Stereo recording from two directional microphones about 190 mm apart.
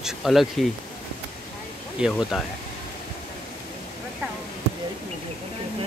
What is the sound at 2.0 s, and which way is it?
Speech, centre (ahead or behind).